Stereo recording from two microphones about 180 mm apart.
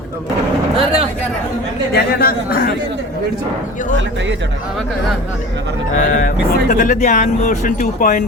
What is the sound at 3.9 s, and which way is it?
Speech, 90° right.